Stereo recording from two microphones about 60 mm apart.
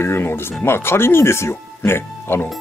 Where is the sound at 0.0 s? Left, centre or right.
Left.